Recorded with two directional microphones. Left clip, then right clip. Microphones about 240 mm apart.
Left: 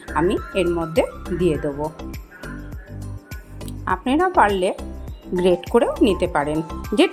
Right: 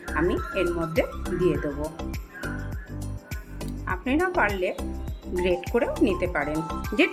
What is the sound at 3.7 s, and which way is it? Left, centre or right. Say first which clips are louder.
Speech: left 6 dB; left.